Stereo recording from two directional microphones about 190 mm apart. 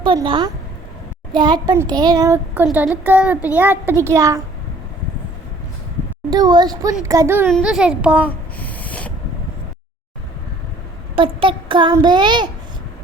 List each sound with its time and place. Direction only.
0.0 s a child's voice: 25° right (ahead or behind)
6.3 s a child's voice: 20° right (ahead or behind); by 8.2 s 5° right (ahead or behind)
8.3 s a sound: 10° left (ahead or behind)
11.1 s child singing: 25° right (ahead or behind)
11.9 s a child's voice: 25° right (ahead or behind)